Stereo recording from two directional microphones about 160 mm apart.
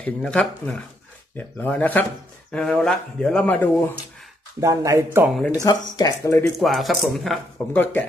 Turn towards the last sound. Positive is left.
turn(degrees=10)  # may be behind; listen again after turning